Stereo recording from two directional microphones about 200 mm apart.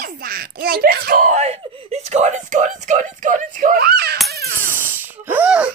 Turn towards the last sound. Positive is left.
turn(degrees=-5)  # may be behind; listen again after turning